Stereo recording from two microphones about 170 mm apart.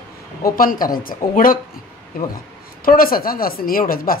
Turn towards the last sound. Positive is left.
turn(degrees=60)  # may be behind; listen again after turning